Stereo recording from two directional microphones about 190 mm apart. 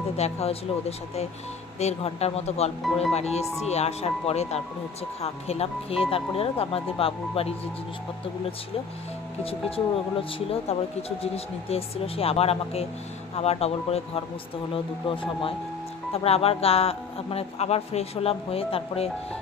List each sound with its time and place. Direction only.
0.2 s speech: 35° left (ahead or behind)
9.4 s speech: 30° left (ahead or behind)